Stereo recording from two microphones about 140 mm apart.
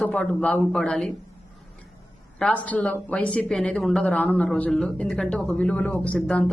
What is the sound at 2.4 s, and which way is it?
A woman's voice, 10° left (ahead or behind).